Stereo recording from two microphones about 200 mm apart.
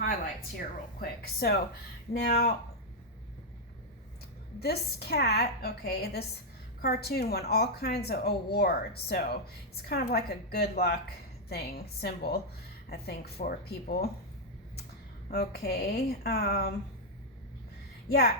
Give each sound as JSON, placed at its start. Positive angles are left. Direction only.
{"t": 0.9, "sound": "speech", "side_deg": 50}
{"t": 4.6, "sound": "speech", "side_deg": 50}
{"t": 15.3, "sound": "speech", "side_deg": 55}
{"t": 18.1, "sound": "speech", "side_deg": 55}